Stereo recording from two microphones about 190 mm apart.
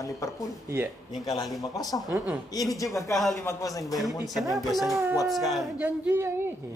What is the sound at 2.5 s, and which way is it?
Speech, 20° left (ahead or behind).